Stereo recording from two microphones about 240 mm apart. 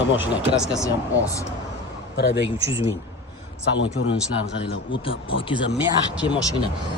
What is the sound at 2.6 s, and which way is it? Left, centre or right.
Speech, centre.